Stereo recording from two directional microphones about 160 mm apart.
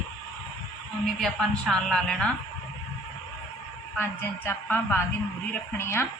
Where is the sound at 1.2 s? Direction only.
Centre (ahead or behind).